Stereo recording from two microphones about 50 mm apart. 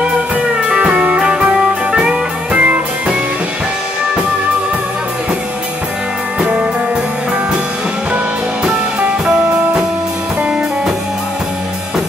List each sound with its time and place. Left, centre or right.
0.7 s music: right
9.2 s music: centre